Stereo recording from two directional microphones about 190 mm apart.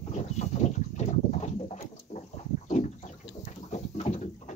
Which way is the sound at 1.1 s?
40° left (ahead or behind).